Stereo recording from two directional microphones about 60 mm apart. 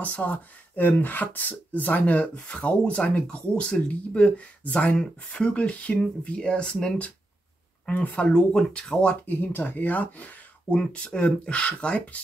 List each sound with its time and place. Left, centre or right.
0.0 s speech: left
8.5 s speech: centre
9.2 s speech: left